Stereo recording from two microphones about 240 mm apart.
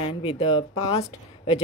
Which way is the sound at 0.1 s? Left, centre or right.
Left.